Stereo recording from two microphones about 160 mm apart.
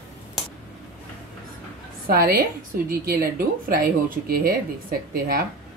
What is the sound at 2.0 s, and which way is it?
Speech, 70° right (ahead or behind).